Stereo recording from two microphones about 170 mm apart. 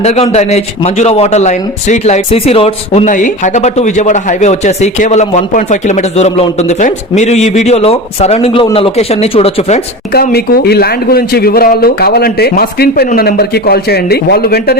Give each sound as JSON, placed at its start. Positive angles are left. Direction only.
{"t": 0.0, "sound": "a man's voice", "side_deg": 35}
{"t": 10.1, "sound": "a man's voice", "side_deg": 65}